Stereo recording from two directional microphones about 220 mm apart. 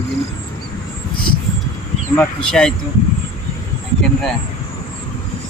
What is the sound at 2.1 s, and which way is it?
Speech, 5° left (ahead or behind).